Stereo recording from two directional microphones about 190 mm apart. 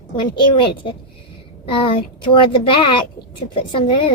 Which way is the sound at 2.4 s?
25° left (ahead or behind).